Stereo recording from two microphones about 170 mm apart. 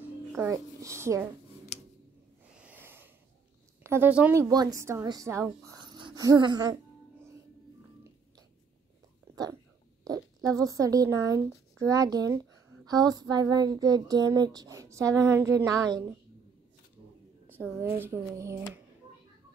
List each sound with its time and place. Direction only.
0.3 s a woman's voice: 15° right (ahead or behind)
2.5 s a sound: 10° right (ahead or behind)
3.8 s a woman's voice: 15° right (ahead or behind)
5.7 s speech: 25° right (ahead or behind)
9.3 s dog: 20° right (ahead or behind)
10.0 s speech: 20° right (ahead or behind)
12.8 s a sound: 20° right (ahead or behind)
17.8 s a woman's voice: 10° right (ahead or behind)